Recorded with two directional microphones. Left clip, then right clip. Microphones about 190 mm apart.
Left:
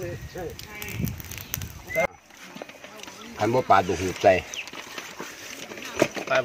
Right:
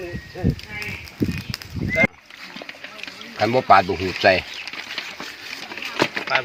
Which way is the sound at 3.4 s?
45° right (ahead or behind).